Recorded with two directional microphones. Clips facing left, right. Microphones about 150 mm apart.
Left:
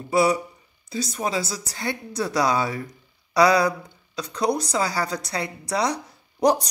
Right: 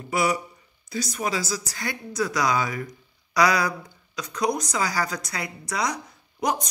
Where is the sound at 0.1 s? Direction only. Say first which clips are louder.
Left 4 dB; 30° left (ahead or behind).